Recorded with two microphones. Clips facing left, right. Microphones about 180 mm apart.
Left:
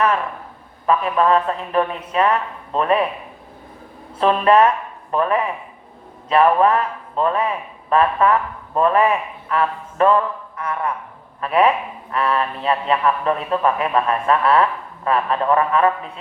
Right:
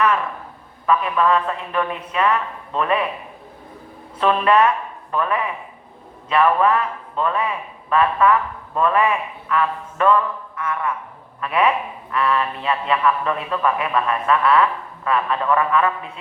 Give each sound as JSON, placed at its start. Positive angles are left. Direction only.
{"t": 0.9, "sound": "a man's voice", "side_deg": 35}
{"t": 4.2, "sound": "a man's voice", "side_deg": 35}